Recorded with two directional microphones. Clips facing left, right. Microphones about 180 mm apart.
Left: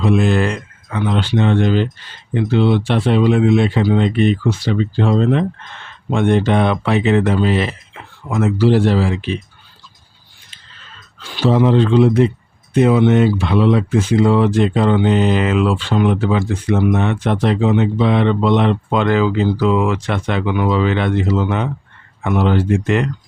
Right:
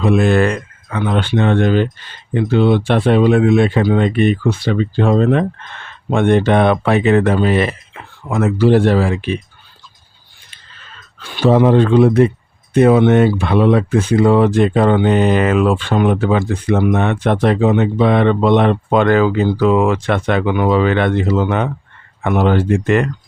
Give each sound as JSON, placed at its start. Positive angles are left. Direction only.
{"t": 0.0, "sound": "speech", "side_deg": -55}
{"t": 11.2, "sound": "speech", "side_deg": -55}